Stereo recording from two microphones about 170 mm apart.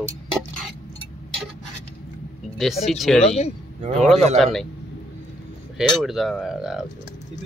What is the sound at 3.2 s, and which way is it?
Speech, 40° left (ahead or behind).